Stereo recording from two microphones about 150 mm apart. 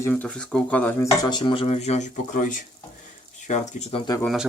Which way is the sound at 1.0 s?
25° left (ahead or behind).